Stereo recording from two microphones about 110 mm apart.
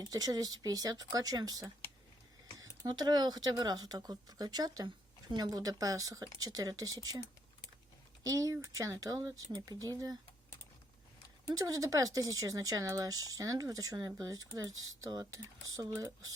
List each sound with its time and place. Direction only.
0.0 s speech: 35° right (ahead or behind)
8.2 s speech: 30° right (ahead or behind)
11.4 s speech: 30° right (ahead or behind)